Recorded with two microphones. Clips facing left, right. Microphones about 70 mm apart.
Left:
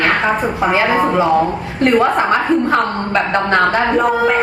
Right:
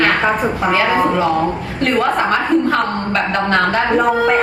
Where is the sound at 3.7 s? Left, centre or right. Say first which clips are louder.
Even; centre.